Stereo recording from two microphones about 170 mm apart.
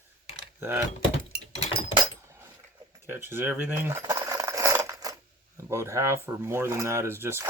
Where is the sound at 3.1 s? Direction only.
15° right (ahead or behind).